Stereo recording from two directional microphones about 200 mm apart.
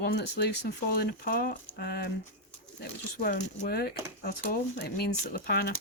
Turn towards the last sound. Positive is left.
turn(degrees=50)  # may be behind; listen again after turning